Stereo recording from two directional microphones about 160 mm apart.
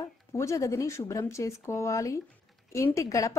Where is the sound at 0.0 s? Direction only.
20° left (ahead or behind).